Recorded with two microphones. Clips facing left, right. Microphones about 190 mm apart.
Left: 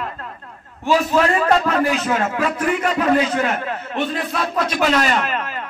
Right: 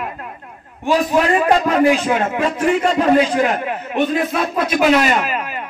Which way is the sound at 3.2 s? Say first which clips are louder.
Right 3 dB; 15° right (ahead or behind).